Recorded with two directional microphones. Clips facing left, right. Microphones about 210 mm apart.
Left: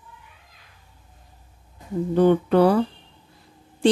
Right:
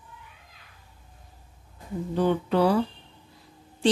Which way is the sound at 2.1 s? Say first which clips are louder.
Left 6 dB; 55° left (ahead or behind).